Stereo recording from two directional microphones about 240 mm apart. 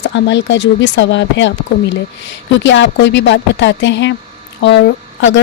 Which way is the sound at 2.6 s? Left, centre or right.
Left.